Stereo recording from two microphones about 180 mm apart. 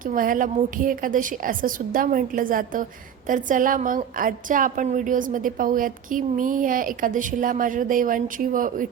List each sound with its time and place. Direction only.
0.0 s a woman's voice: 50° right (ahead or behind)